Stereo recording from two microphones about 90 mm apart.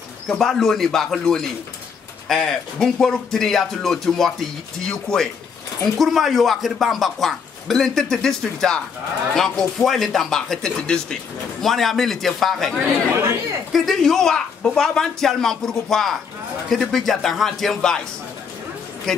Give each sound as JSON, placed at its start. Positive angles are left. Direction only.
{"t": 0.3, "sound": "speech", "side_deg": 0}
{"t": 13.1, "sound": "speech", "side_deg": -30}
{"t": 13.7, "sound": "speech", "side_deg": 0}
{"t": 19.1, "sound": "speech", "side_deg": 5}